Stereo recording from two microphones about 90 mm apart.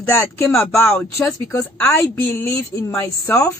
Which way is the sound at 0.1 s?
25° left (ahead or behind).